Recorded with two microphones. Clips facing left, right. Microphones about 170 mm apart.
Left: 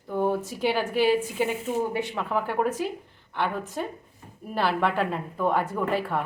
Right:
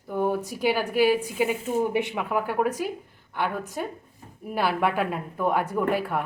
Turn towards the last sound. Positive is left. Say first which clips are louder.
# right 2 dB
turn(degrees=-10)  # may be behind; listen again after turning